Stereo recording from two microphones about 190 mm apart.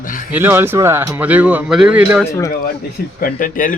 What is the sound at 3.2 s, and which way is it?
Speech, 45° left (ahead or behind).